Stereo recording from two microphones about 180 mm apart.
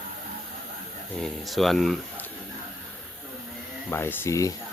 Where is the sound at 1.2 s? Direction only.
Centre (ahead or behind).